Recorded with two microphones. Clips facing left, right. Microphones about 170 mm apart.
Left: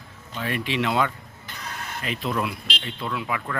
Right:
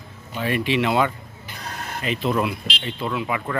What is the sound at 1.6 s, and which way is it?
Vehicle, 35° right (ahead or behind).